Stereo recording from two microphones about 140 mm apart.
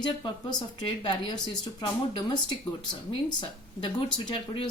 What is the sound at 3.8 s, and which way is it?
Speech, 35° left (ahead or behind).